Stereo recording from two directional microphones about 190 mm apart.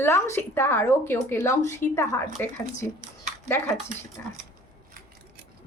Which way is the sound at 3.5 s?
10° left (ahead or behind).